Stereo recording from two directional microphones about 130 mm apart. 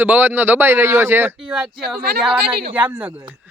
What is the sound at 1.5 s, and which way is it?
Speech, 5° right (ahead or behind).